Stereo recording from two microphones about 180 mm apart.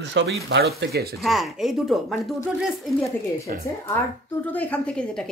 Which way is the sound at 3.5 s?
50° right (ahead or behind).